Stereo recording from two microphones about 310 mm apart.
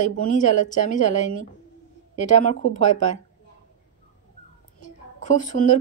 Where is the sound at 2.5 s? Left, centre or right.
Left.